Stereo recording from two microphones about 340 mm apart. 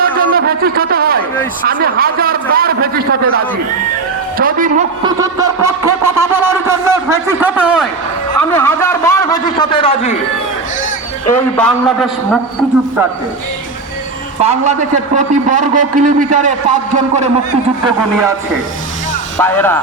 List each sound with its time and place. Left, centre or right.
0.0 s a sound: right
1.6 s a man's voice: right
5.0 s a sound: centre
8.4 s a man's voice: centre
11.3 s a man's voice: centre
14.4 s a man's voice: centre
19.4 s a man's voice: centre